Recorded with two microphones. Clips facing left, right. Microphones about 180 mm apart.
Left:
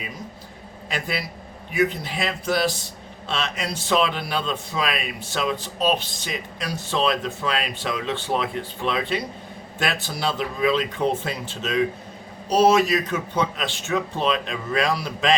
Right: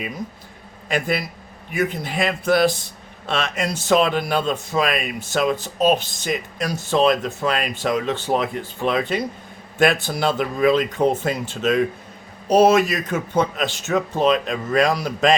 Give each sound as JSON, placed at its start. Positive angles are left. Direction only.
{"t": 0.9, "sound": "a man's voice", "side_deg": -50}